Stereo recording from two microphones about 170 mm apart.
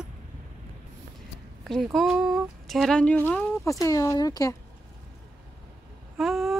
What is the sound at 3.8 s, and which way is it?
Speech, 20° left (ahead or behind).